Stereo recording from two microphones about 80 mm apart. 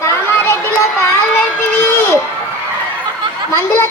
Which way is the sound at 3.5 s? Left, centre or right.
Left.